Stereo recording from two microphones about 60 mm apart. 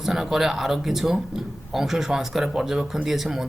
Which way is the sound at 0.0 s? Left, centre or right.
Centre.